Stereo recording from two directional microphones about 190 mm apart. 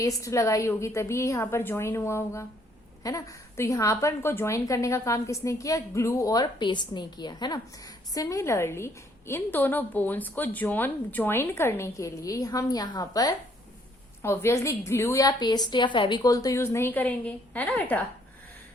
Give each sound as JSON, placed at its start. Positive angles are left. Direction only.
{"t": 0.0, "sound": "a woman's voice", "side_deg": 15}